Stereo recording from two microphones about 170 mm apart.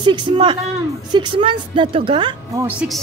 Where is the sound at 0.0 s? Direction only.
30° right (ahead or behind).